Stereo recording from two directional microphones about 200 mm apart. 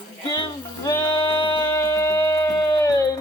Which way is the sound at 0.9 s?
20° left (ahead or behind).